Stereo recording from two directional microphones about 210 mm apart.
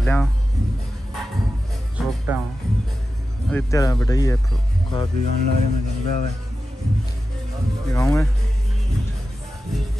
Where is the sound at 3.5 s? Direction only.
10° left (ahead or behind).